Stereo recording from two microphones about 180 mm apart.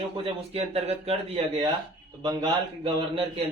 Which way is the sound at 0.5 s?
35° right (ahead or behind).